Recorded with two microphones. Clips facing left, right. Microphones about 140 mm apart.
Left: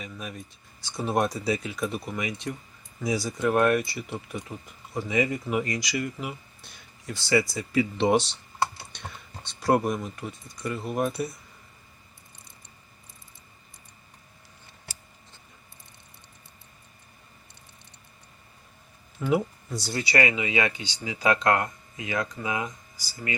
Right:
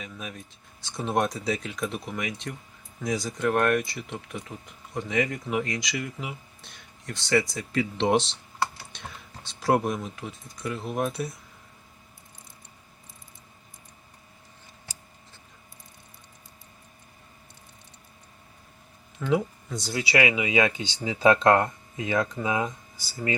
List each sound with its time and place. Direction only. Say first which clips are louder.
0.0 s speech: left 1 dB; centre (ahead or behind)
19.7 s speech: right 1 dB; centre (ahead or behind); by 23.3 s 25° right (ahead or behind)